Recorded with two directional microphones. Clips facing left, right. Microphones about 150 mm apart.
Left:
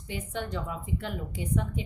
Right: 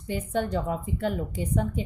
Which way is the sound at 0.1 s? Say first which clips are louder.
Right 7 dB; 45° right (ahead or behind).